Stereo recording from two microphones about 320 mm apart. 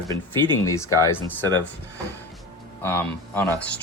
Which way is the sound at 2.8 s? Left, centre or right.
Centre.